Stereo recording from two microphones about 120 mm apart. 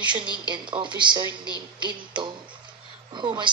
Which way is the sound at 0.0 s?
40° right (ahead or behind).